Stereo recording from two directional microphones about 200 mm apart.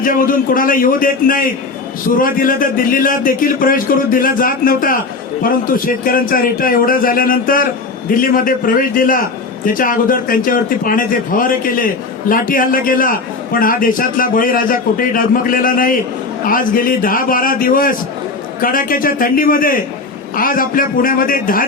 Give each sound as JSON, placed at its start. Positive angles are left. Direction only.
{"t": 0.0, "sound": "a man's voice", "side_deg": 45}